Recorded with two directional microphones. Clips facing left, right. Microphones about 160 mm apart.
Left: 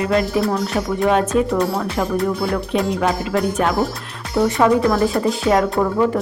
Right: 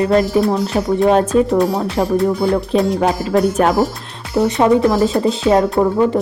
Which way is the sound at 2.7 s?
Centre (ahead or behind).